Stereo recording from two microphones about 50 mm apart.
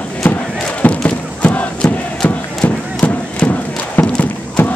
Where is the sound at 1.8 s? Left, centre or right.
Centre.